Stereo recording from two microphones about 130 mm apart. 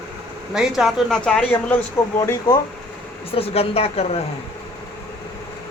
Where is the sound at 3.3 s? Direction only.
50° left (ahead or behind).